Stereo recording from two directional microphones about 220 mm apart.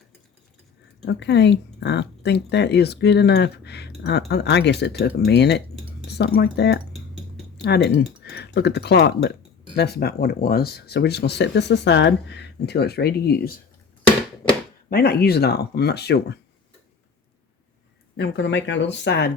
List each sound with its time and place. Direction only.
1.0 s speech: 50° left (ahead or behind)
14.8 s speech: 45° left (ahead or behind)
18.2 s speech: 55° left (ahead or behind)